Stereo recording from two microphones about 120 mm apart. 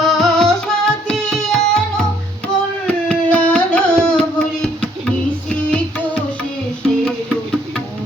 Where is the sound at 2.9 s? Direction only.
10° left (ahead or behind).